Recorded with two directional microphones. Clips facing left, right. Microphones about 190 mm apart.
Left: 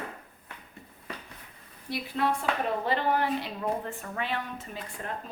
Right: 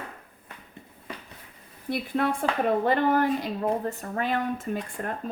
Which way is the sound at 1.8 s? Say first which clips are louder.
Right 3 dB; 50° right (ahead or behind).